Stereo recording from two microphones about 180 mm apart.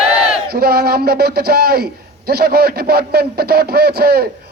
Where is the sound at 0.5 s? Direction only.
60° right (ahead or behind).